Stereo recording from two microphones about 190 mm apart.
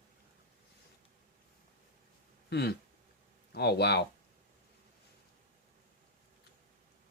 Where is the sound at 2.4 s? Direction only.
60° left (ahead or behind).